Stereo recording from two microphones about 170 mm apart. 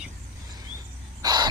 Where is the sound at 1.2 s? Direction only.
25° right (ahead or behind).